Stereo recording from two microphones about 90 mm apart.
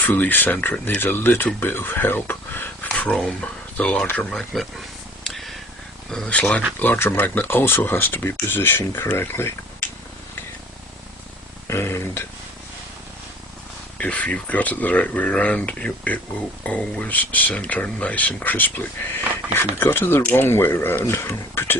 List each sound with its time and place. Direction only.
0.0 s speech: 20° left (ahead or behind)
4.3 s speech: 5° left (ahead or behind)
5.2 s a sound: centre (ahead or behind)
6.1 s speech: 10° left (ahead or behind); by 9.5 s 25° left (ahead or behind)
11.7 s a sound: 30° left (ahead or behind)
14.0 s speech: 15° left (ahead or behind)